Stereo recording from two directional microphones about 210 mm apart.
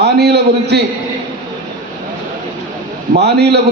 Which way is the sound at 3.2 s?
50° right (ahead or behind).